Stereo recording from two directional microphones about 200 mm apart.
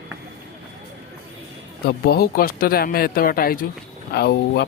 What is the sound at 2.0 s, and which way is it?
Speech, 50° left (ahead or behind).